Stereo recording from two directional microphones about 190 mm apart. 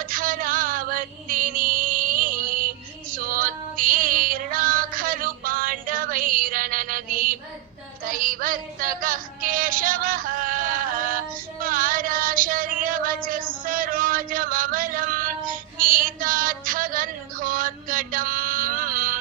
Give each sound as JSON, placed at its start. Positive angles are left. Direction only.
{"t": 0.0, "sound": "music", "side_deg": -45}
{"t": 8.0, "sound": "synthetic singing", "side_deg": -45}
{"t": 11.6, "sound": "a sound", "side_deg": -45}